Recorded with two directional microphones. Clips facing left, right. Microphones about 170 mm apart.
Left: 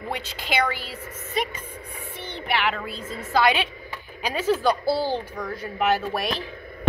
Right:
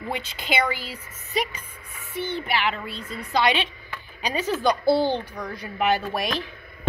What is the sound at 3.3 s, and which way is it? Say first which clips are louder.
A woman's voice: left 1 dB; 5° left (ahead or behind).